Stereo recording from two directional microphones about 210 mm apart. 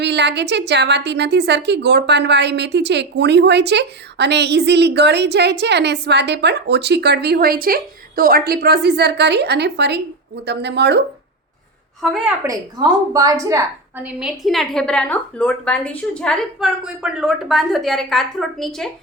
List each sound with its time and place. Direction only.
0.0 s a woman's voice: 55° right (ahead or behind)
12.1 s a woman's voice: 5° right (ahead or behind)
12.5 s a woman's voice: 15° right (ahead or behind)
14.2 s a woman's voice: centre (ahead or behind)